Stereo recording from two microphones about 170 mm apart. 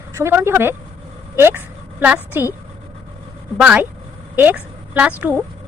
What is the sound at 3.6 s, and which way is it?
Speech, 5° right (ahead or behind).